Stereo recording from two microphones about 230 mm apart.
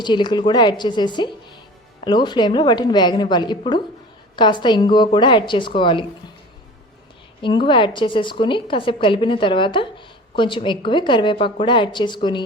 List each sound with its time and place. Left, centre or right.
0.0 s a woman's voice: centre
7.4 s a woman's voice: left